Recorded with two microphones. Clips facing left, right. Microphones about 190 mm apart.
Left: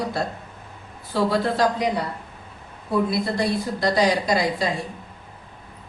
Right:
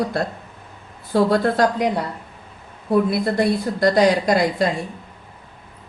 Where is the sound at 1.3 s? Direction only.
50° right (ahead or behind).